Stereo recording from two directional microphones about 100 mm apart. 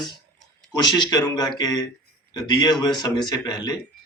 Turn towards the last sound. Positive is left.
turn(degrees=45)  # may be behind; listen again after turning